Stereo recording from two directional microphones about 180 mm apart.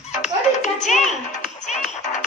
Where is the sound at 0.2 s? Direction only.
40° left (ahead or behind).